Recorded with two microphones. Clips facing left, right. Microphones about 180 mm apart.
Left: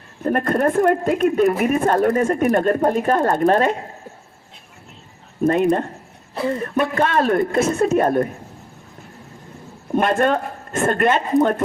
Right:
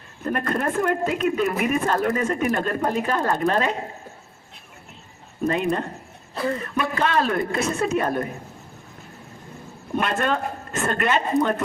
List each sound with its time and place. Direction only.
0.2 s speech: 45° left (ahead or behind)
5.5 s speech: 45° left (ahead or behind)
6.9 s speech: 50° left (ahead or behind)
9.9 s speech: 45° left (ahead or behind)